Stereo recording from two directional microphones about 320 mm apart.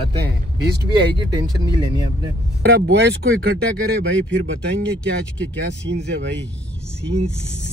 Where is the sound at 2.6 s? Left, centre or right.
Right.